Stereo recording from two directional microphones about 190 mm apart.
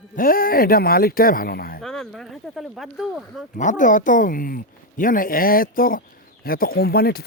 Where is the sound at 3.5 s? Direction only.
40° left (ahead or behind).